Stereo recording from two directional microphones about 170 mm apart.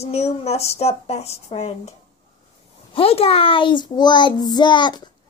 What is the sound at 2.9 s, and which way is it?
A child's voice, 35° left (ahead or behind).